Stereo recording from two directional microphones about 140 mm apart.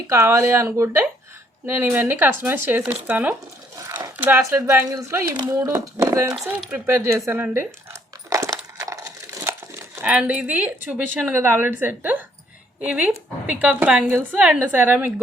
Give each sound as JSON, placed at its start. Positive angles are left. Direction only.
{"t": 0.1, "sound": "a woman's voice", "side_deg": -20}
{"t": 3.8, "sound": "a sound", "side_deg": -20}
{"t": 4.2, "sound": "speech", "side_deg": -15}
{"t": 6.6, "sound": "a woman's voice", "side_deg": -10}
{"t": 8.3, "sound": "a sound", "side_deg": -20}
{"t": 10.8, "sound": "a woman's voice", "side_deg": -10}